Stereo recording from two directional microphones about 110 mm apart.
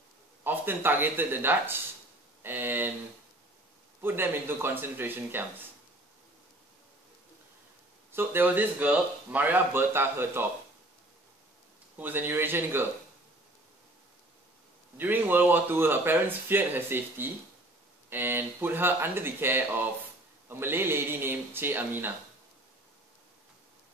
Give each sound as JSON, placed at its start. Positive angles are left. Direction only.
{"t": 0.4, "sound": "speech", "side_deg": -20}
{"t": 4.0, "sound": "speech", "side_deg": -20}
{"t": 8.1, "sound": "speech", "side_deg": -20}
{"t": 12.0, "sound": "speech", "side_deg": -20}
{"t": 15.0, "sound": "speech", "side_deg": -15}